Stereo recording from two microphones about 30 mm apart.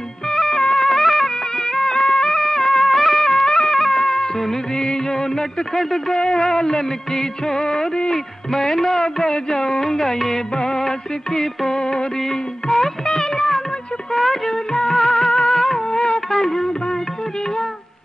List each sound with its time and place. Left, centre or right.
0.3 s music: centre
4.7 s music: left
8.1 s music: centre
10.5 s music: left
12.2 s music: centre
14.5 s music of bollywood: left
14.9 s music: centre